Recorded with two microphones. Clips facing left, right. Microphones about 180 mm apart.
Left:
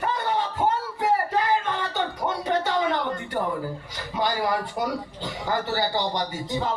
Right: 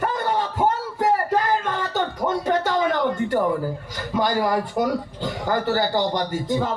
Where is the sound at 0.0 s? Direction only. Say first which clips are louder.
Right 3 dB; 50° right (ahead or behind).